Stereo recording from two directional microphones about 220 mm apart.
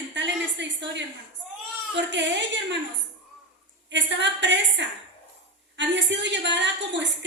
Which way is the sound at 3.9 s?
55° right (ahead or behind).